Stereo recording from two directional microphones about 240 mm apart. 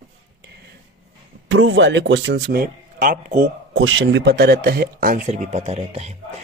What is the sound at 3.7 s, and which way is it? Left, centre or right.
Speech, right.